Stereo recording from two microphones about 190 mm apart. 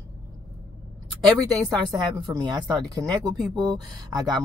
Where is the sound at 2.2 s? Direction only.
25° right (ahead or behind).